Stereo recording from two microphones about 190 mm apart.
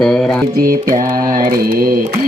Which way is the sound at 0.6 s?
50° right (ahead or behind).